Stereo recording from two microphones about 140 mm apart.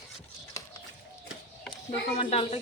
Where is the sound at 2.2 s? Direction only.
45° left (ahead or behind).